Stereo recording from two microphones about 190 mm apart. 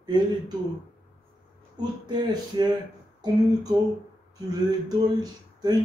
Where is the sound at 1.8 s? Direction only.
20° right (ahead or behind).